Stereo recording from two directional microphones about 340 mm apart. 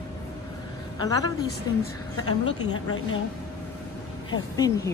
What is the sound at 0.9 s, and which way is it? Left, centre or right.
Speech, centre.